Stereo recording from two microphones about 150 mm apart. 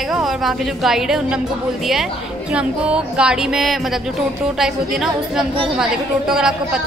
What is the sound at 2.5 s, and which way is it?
A woman's voice, 5° right (ahead or behind).